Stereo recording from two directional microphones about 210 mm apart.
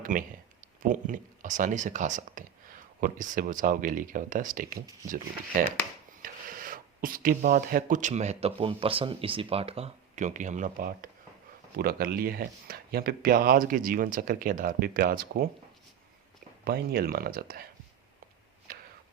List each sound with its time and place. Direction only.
0.0 s speech: 40° right (ahead or behind)
16.6 s speech: 45° right (ahead or behind)